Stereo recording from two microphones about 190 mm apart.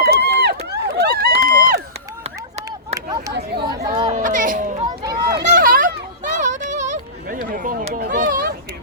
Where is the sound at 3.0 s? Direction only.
15° right (ahead or behind).